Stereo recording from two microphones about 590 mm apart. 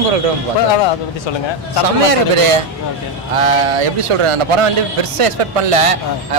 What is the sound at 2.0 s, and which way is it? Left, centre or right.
A man's voice, right.